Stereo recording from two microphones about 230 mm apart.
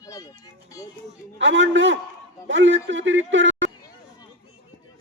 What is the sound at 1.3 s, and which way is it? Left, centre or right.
A man's voice, right.